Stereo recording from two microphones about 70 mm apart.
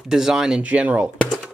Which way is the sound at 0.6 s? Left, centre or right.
Centre.